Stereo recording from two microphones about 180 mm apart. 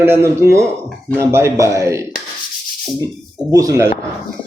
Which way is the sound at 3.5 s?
20° right (ahead or behind).